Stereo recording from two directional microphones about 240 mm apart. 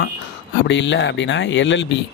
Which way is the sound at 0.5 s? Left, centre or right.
Left.